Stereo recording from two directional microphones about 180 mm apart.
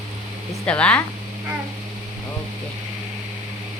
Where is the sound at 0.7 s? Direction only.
5° left (ahead or behind).